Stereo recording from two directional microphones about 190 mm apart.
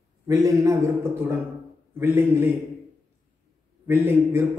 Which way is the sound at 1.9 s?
10° right (ahead or behind).